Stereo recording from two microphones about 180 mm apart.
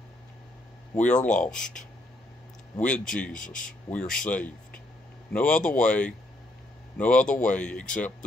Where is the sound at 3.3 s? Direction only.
45° left (ahead or behind).